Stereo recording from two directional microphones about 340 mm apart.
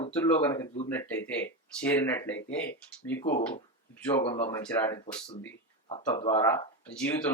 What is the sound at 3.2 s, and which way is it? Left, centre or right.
Speech, left.